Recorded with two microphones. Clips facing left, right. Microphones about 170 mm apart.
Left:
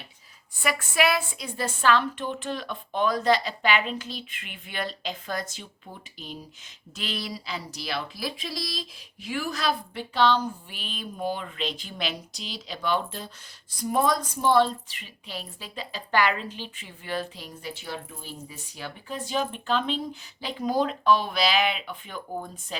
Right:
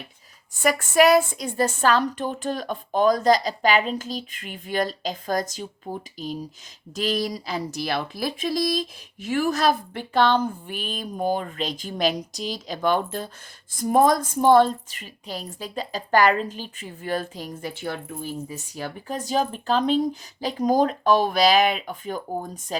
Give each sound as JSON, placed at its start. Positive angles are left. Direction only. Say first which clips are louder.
{"t": 0.6, "sound": "a woman's voice", "louder": "right 7 dB", "side_deg": -45}